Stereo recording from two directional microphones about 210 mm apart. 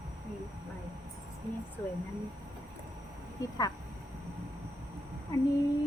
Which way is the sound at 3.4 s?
15° left (ahead or behind).